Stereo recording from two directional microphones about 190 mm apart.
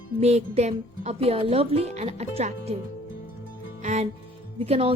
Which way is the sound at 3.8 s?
40° right (ahead or behind).